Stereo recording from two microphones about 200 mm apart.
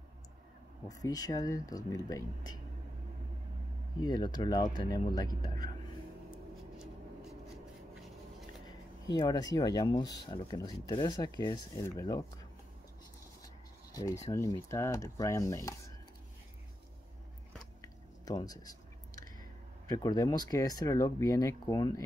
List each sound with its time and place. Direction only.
1.0 s speech: 20° left (ahead or behind)
4.0 s speech: 20° left (ahead or behind)
8.6 s speech: 20° left (ahead or behind)
13.9 s speech: 15° left (ahead or behind)
17.8 s a sound: 20° left (ahead or behind)
19.9 s speech: 15° left (ahead or behind)